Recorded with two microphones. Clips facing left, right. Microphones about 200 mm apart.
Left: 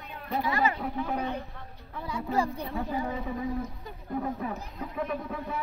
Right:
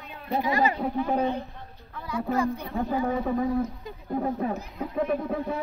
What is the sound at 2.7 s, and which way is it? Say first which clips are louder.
A woman's voice: right 5 dB; 50° right (ahead or behind).